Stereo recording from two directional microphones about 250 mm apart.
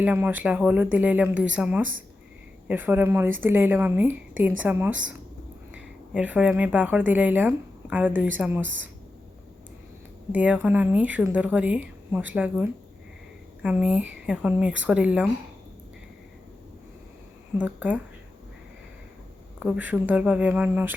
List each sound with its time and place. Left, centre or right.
0.0 s speech: centre
8.6 s a woman's voice: right
10.3 s speech: centre
17.6 s speech: centre
19.5 s speech: centre